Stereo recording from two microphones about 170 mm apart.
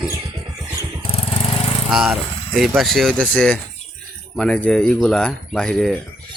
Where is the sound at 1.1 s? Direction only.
35° left (ahead or behind).